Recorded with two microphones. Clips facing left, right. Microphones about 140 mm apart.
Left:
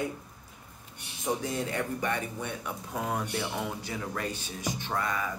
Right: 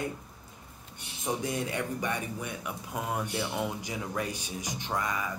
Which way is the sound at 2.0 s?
10° right (ahead or behind).